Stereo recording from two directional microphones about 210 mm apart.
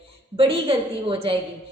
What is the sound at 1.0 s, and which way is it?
Speech, 25° right (ahead or behind).